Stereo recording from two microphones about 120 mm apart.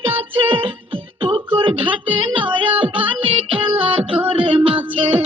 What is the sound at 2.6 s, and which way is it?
Music, 45° right (ahead or behind).